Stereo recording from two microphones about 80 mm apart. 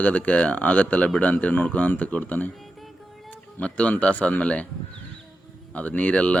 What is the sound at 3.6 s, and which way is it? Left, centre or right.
Speech, centre.